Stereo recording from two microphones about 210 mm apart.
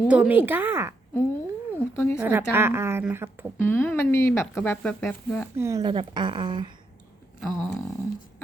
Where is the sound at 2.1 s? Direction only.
10° right (ahead or behind).